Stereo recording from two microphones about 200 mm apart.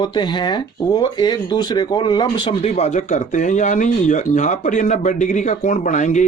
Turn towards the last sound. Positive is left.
turn(degrees=40)  # may be behind; listen again after turning